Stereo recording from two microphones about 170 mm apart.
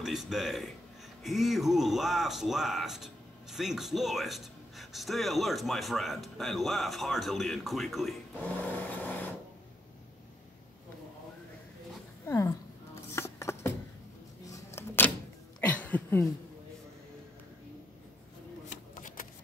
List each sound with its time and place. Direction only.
0.0 s a man's voice: centre (ahead or behind)
8.5 s vehicle: 10° left (ahead or behind)
12.3 s a sound: 15° left (ahead or behind)
18.7 s shuffling cards: 50° left (ahead or behind)